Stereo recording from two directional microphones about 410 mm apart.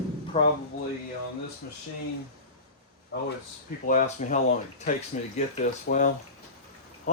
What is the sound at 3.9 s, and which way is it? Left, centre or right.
Speech, centre.